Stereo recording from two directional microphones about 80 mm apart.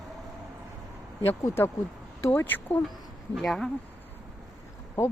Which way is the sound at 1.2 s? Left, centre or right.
Left.